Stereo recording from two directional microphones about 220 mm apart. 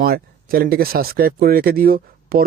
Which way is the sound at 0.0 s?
40° right (ahead or behind).